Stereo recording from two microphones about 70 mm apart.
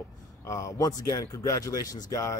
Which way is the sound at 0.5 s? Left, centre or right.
Left.